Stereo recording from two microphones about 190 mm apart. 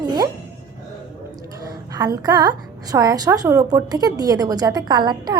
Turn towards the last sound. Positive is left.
turn(degrees=-20)  # may be behind; listen again after turning